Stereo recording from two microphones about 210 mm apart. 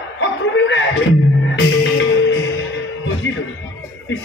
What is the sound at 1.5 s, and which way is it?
Music, 60° left (ahead or behind).